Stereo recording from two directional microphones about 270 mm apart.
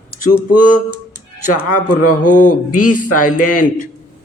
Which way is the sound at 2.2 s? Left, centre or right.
Left.